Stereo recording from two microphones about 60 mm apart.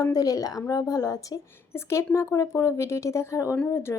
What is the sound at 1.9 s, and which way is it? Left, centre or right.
Speech, left.